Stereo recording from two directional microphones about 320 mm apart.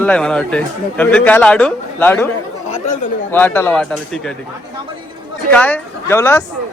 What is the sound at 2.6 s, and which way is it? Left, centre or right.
Chatter, left.